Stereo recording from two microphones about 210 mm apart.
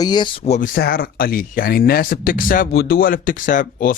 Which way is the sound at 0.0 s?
20° left (ahead or behind).